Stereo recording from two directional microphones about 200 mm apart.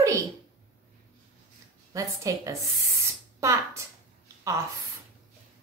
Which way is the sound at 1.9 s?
15° right (ahead or behind).